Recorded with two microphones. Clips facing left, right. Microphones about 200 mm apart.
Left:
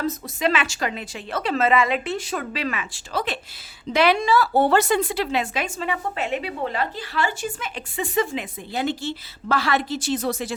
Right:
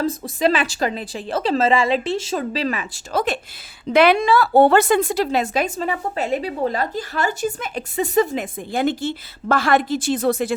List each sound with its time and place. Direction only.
0.0 s a woman's voice: 35° right (ahead or behind)
3.9 s a woman's voice: 55° right (ahead or behind)